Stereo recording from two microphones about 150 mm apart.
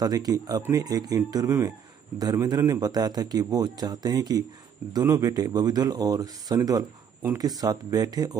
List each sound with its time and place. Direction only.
0.0 s a man's voice: 25° right (ahead or behind)